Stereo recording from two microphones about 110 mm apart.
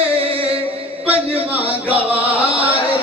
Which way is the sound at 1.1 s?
60° right (ahead or behind).